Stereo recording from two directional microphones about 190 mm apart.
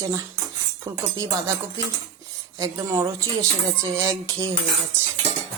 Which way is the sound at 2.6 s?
15° right (ahead or behind).